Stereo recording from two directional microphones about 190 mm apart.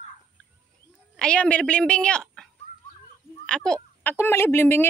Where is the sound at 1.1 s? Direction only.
5° left (ahead or behind).